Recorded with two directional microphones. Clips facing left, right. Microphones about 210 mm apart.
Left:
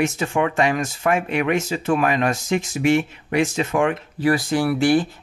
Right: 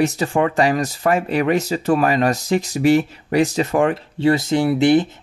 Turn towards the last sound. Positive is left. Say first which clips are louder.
# right 3 dB
turn(degrees=-20)  # may be behind; listen again after turning